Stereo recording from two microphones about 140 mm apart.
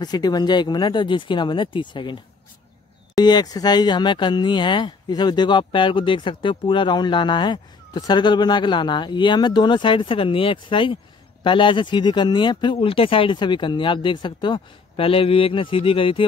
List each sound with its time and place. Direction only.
0.0 s speech: 30° left (ahead or behind)
3.2 s speech: 30° left (ahead or behind)